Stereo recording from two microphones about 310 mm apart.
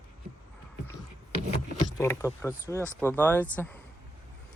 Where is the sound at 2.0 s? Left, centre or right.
Centre.